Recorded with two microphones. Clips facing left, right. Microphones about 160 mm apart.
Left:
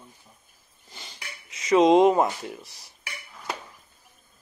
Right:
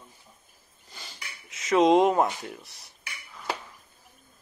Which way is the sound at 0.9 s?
Centre (ahead or behind).